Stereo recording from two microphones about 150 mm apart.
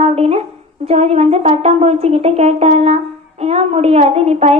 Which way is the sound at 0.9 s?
45° right (ahead or behind).